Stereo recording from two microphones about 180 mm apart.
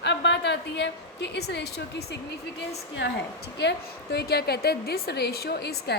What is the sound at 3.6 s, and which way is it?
A woman's voice, 65° left (ahead or behind).